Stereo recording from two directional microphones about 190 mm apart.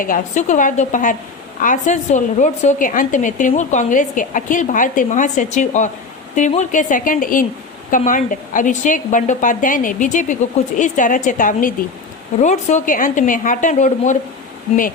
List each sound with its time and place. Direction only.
0.0 s a woman's voice: 45° left (ahead or behind)